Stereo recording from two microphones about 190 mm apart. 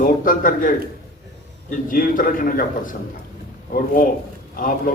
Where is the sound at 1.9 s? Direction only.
50° left (ahead or behind).